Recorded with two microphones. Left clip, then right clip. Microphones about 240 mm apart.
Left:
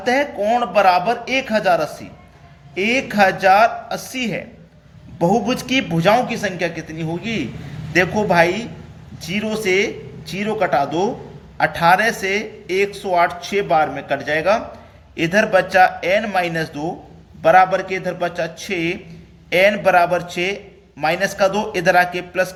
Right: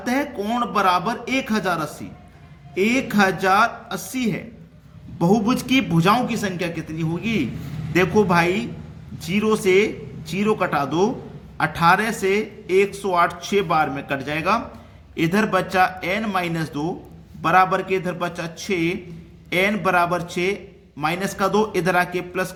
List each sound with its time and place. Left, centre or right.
0.0 s a man's voice: centre